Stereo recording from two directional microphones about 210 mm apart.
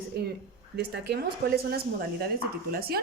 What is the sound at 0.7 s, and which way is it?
A woman's voice, 50° right (ahead or behind).